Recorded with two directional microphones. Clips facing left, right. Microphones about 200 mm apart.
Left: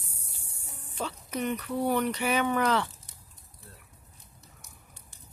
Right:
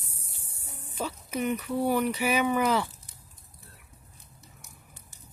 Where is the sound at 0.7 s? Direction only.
10° right (ahead or behind).